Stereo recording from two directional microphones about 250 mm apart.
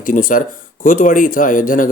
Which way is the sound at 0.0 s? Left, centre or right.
Left.